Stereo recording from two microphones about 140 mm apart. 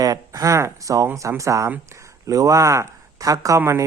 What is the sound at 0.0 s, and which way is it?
A man's voice, 25° right (ahead or behind).